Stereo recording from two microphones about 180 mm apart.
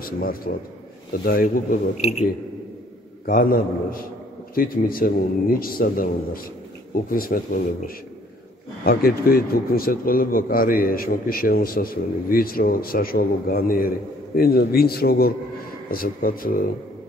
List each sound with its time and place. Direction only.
0.0 s a man's voice: 55° left (ahead or behind)
3.3 s a man's voice: 50° left (ahead or behind)